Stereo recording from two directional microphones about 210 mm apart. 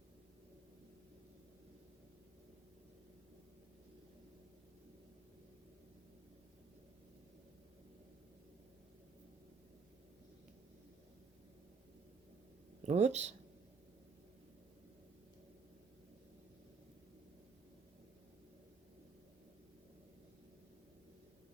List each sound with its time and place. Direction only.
12.8 s speech: 35° right (ahead or behind)